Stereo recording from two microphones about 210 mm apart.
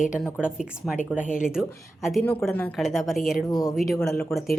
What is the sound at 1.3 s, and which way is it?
A woman's voice, 5° right (ahead or behind).